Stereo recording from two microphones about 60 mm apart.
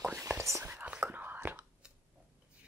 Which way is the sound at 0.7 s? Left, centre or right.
Centre.